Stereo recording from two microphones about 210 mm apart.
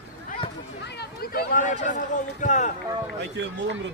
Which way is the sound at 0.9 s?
50° left (ahead or behind).